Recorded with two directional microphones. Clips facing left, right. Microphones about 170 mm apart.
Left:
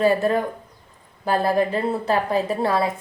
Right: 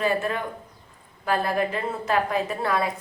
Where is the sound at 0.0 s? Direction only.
35° left (ahead or behind).